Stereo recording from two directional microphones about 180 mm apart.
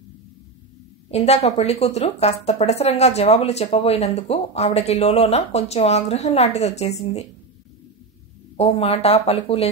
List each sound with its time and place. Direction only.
1.1 s speech: 35° left (ahead or behind)
8.5 s speech: 35° left (ahead or behind)